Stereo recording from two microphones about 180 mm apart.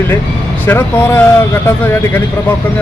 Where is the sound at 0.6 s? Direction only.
10° left (ahead or behind).